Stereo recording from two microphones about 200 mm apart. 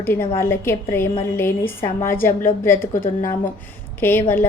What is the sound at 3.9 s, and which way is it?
Speech, 10° left (ahead or behind).